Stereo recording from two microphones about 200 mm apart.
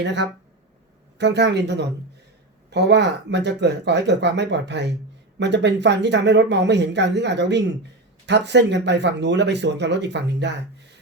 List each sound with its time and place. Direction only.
0.0 s speech: 60° right (ahead or behind)